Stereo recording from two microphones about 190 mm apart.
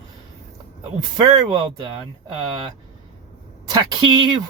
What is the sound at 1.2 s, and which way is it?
Speech, 20° right (ahead or behind).